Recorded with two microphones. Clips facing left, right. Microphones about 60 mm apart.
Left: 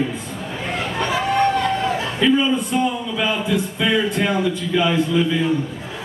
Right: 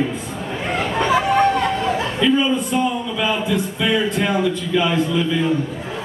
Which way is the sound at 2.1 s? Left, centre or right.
Centre.